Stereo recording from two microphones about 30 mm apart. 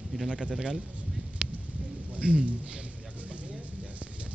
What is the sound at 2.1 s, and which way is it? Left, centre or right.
Speech, right.